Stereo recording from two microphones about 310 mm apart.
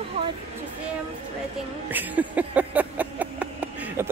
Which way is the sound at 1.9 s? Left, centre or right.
Centre.